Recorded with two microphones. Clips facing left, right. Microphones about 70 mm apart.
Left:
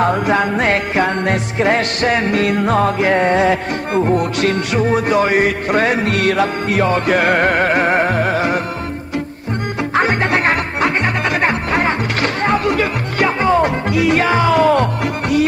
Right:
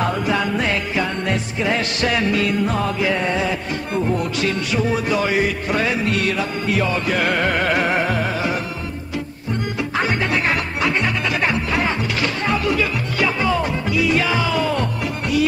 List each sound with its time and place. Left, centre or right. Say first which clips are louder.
0.0 s music: left 5 dB; left
2.4 s music: left 5 dB; left
9.9 s music: left 6 dB; left